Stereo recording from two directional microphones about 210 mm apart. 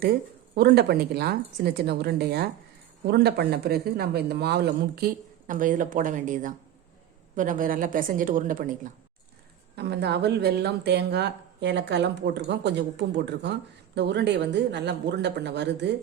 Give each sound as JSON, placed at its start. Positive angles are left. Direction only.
{"t": 0.5, "sound": "a woman's voice", "side_deg": -50}
{"t": 9.7, "sound": "speech", "side_deg": -50}